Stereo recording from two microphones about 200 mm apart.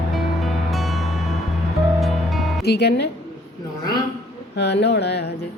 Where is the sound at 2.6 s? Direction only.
55° left (ahead or behind).